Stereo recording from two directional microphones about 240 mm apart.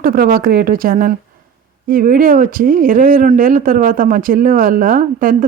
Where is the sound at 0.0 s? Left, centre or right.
Right.